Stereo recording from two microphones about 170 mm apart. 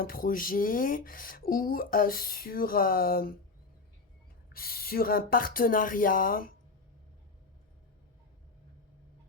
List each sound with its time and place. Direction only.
0.0 s speech: 55° left (ahead or behind)
4.5 s speech: 60° left (ahead or behind)